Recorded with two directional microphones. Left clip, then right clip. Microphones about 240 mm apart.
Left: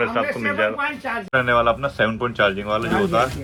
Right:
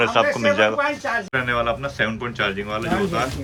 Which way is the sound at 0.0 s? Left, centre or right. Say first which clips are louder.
Right 4 dB; centre.